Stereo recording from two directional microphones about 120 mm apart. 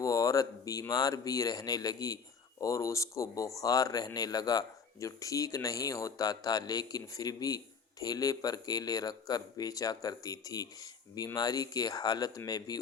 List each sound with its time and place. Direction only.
0.0 s speech: 30° left (ahead or behind)